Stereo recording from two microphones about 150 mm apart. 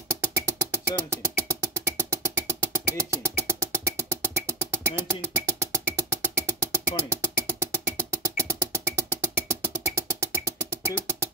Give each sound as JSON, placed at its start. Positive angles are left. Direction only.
{"t": 0.1, "sound": "music", "side_deg": -20}